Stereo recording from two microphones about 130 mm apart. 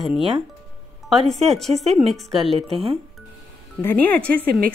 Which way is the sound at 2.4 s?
45° right (ahead or behind).